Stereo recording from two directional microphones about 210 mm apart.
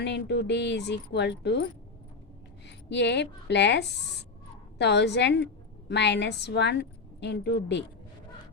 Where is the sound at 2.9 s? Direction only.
55° left (ahead or behind).